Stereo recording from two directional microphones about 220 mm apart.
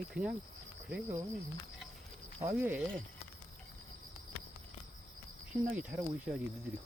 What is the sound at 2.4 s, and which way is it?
Speech, 10° right (ahead or behind).